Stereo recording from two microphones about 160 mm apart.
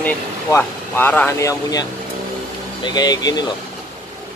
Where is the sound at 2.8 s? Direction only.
25° left (ahead or behind).